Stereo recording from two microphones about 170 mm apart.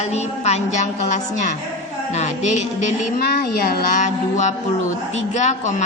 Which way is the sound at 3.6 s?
55° left (ahead or behind).